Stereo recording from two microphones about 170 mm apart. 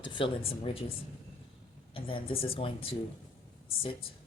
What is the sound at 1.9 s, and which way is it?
Speech, 30° left (ahead or behind).